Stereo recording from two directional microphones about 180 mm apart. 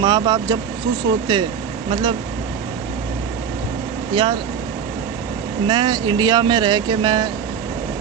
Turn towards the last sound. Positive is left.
turn(degrees=-20)  # may be behind; listen again after turning